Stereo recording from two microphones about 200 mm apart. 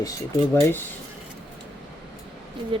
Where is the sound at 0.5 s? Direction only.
10° left (ahead or behind).